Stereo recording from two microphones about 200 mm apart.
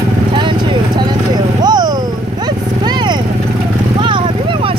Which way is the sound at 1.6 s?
20° right (ahead or behind).